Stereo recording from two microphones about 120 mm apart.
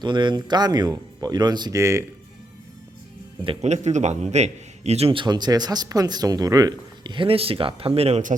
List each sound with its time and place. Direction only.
0.0 s speech: 40° right (ahead or behind)
1.8 s speech: 25° right (ahead or behind)
3.6 s a man's voice: 70° right (ahead or behind)